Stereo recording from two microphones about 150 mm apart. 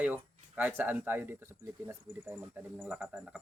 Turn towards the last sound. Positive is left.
turn(degrees=-10)  # may be behind; listen again after turning